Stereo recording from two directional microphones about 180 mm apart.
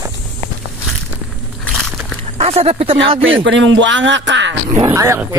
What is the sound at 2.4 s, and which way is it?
Speech, 35° right (ahead or behind).